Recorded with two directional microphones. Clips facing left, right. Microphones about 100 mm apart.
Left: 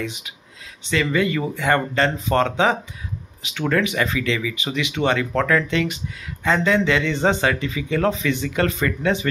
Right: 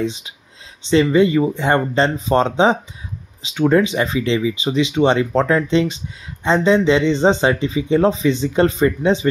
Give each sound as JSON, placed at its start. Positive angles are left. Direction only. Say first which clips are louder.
{"t": 0.0, "sound": "speech", "louder": "right 7 dB", "side_deg": -25}